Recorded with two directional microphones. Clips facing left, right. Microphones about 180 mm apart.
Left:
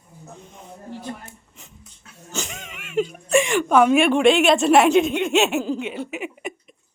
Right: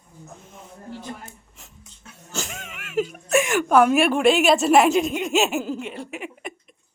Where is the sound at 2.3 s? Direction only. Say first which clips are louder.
Left 1 dB; centre (ahead or behind).